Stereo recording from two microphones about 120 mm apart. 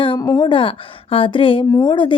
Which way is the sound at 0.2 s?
35° left (ahead or behind).